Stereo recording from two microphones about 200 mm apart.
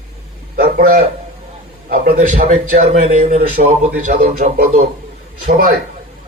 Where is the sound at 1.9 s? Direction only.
50° right (ahead or behind).